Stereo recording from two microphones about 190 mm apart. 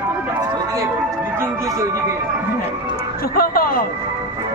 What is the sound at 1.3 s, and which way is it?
Music, 15° right (ahead or behind).